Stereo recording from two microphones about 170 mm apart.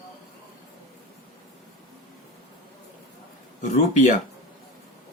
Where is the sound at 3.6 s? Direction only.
45° left (ahead or behind).